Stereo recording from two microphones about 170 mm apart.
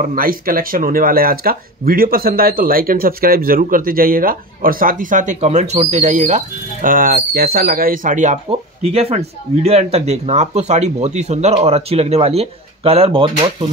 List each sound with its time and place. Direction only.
0.0 s speech: 55° right (ahead or behind)
8.5 s speech: 35° right (ahead or behind)